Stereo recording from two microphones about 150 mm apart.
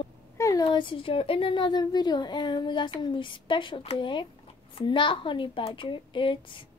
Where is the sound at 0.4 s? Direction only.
20° left (ahead or behind).